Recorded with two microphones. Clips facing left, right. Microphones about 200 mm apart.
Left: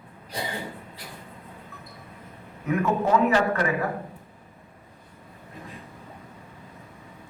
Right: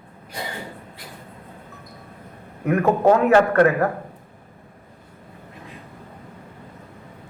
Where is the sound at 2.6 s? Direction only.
60° right (ahead or behind).